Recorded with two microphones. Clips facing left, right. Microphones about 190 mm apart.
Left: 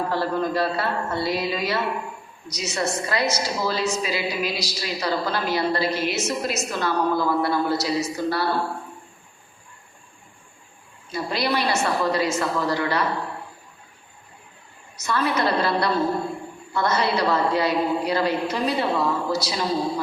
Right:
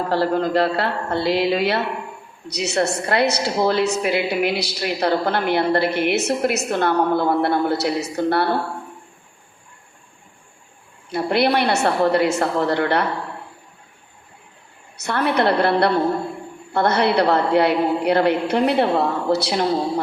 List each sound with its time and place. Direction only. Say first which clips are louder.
0.1 s a woman's voice: right 5 dB; 75° right (ahead or behind); by 8.4 s 60° right (ahead or behind)
11.1 s a woman's voice: right 6 dB; 60° right (ahead or behind)
15.0 s a woman's voice: right 4 dB; 60° right (ahead or behind)